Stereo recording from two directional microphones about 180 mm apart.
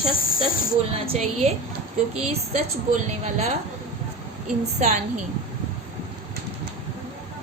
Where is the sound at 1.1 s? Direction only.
35° right (ahead or behind).